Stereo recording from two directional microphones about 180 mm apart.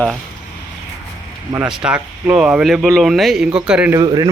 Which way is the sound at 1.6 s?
5° right (ahead or behind).